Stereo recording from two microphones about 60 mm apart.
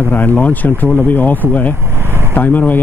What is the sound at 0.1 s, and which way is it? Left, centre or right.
Speech, left.